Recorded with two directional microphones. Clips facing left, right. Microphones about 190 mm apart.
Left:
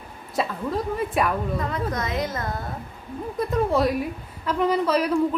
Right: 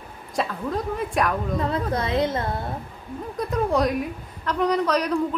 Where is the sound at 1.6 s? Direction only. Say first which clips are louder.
Right 2 dB; 30° right (ahead or behind).